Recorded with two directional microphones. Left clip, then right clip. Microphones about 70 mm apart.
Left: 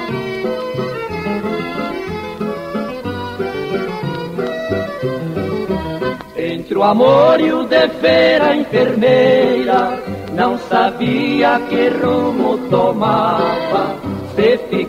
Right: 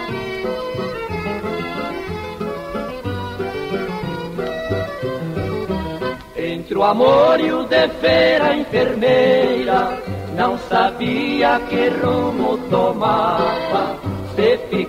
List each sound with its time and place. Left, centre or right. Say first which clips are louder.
0.4 s music: left 3 dB; right
4.4 s music: left 3 dB; right